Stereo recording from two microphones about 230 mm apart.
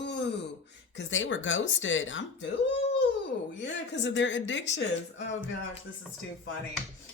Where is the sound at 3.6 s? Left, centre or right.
Left.